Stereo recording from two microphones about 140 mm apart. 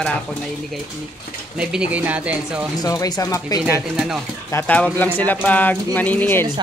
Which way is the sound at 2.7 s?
25° left (ahead or behind).